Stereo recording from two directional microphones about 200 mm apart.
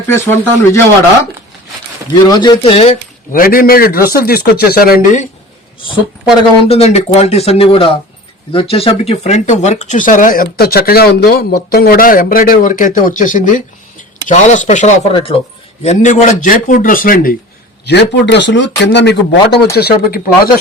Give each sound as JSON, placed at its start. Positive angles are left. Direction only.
{"t": 0.1, "sound": "speech", "side_deg": 10}
{"t": 2.2, "sound": "speech", "side_deg": 20}
{"t": 3.3, "sound": "speech", "side_deg": 45}
{"t": 6.7, "sound": "speech", "side_deg": 30}
{"t": 17.8, "sound": "speech", "side_deg": 60}